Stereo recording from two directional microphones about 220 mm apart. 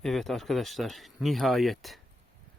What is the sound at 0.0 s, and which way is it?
Speech, centre (ahead or behind).